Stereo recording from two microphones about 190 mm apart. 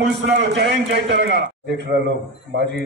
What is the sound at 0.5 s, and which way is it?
Speech, 65° right (ahead or behind).